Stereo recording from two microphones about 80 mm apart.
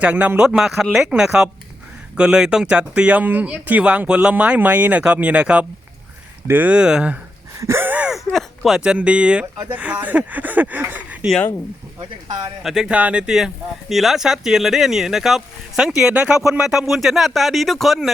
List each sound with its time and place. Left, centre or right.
0.0 s speech: centre
0.4 s speech: centre
7.6 s gasp: right
7.9 s gasp: centre
8.3 s speech: centre
8.8 s speech: centre
12.6 s speech: centre
12.9 s speech: centre